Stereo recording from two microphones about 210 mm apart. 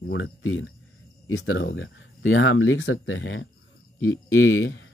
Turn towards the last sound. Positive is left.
turn(degrees=65)  # may be behind; listen again after turning